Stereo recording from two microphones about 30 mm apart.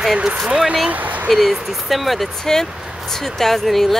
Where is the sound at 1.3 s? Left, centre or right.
Centre.